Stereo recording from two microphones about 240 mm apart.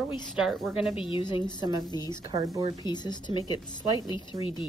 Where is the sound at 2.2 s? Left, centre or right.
Centre.